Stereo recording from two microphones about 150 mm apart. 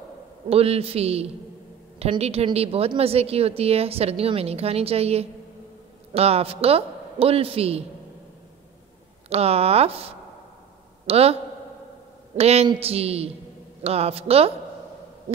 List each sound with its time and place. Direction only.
0.5 s a woman's voice: 40° right (ahead or behind)
9.3 s a woman's voice: 40° right (ahead or behind)
12.4 s a woman's voice: 45° right (ahead or behind)